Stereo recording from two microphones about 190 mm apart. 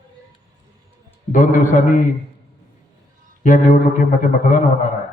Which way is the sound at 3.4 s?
45° left (ahead or behind).